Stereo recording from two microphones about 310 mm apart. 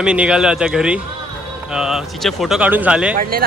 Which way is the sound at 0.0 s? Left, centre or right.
Centre.